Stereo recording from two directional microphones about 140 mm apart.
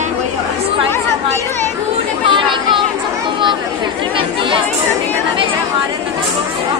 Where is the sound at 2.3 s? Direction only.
35° right (ahead or behind).